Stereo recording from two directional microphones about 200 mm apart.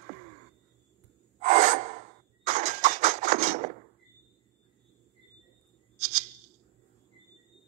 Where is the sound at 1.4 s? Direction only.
40° right (ahead or behind).